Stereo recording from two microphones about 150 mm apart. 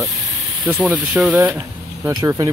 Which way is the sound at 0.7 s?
10° right (ahead or behind).